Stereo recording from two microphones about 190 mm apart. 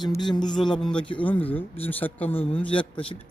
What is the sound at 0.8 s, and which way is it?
A man's voice, 5° left (ahead or behind).